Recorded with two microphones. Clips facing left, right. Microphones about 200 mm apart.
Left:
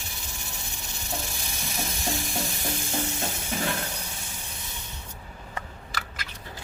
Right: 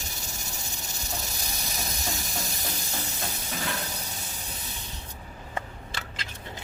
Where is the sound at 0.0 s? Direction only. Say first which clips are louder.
Right 1 dB; 40° right (ahead or behind).